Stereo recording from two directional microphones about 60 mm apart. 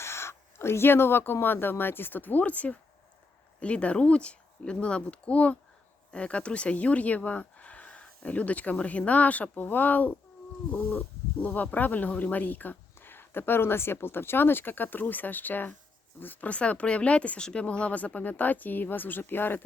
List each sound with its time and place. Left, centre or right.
0.0 s speech: left
11.3 s speech: left